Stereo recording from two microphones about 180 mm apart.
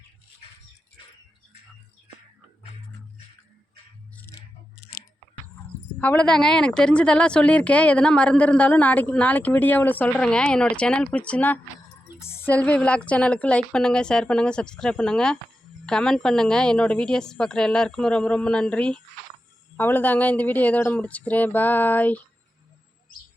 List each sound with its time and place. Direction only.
4.8 s chewing: 55° left (ahead or behind)
6.0 s a woman's voice: 5° left (ahead or behind)